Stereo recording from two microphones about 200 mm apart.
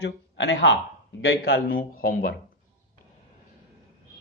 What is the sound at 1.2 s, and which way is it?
Speech, 50° left (ahead or behind).